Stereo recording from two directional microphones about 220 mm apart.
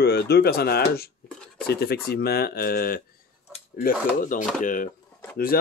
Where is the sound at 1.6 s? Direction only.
45° left (ahead or behind).